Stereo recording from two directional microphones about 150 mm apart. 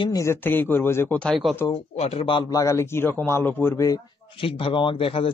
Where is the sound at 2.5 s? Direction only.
20° left (ahead or behind).